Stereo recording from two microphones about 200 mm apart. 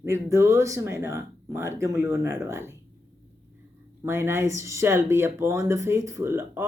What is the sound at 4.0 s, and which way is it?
Speech, 10° right (ahead or behind).